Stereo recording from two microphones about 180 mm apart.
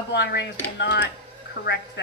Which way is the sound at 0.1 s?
70° left (ahead or behind).